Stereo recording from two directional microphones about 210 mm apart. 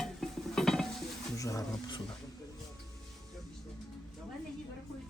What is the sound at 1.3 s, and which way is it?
Speech, 15° left (ahead or behind).